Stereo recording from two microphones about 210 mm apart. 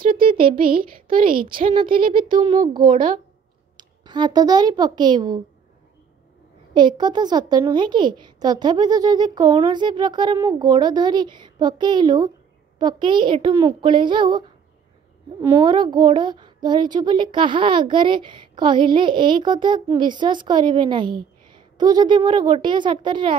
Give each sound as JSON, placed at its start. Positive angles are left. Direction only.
{"t": 0.1, "sound": "a woman's voice", "side_deg": -40}
{"t": 2.1, "sound": "a woman's voice", "side_deg": -20}
{"t": 3.7, "sound": "a child's voice", "side_deg": -20}
{"t": 6.7, "sound": "a woman's voice", "side_deg": -20}
{"t": 15.4, "sound": "a woman's voice", "side_deg": -20}